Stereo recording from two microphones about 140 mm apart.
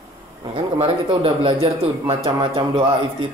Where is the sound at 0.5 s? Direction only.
40° right (ahead or behind).